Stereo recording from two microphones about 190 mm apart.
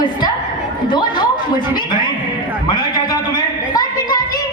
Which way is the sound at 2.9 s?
20° left (ahead or behind).